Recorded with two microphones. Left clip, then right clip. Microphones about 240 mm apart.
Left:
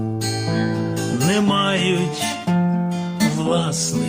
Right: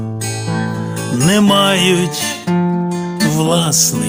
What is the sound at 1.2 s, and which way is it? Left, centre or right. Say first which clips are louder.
Music: right 8 dB; right.